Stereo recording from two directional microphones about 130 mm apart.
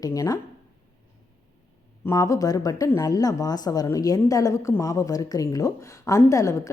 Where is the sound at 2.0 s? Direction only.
25° left (ahead or behind).